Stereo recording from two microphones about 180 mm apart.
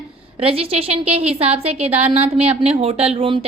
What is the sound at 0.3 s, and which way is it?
A woman's voice, 30° right (ahead or behind).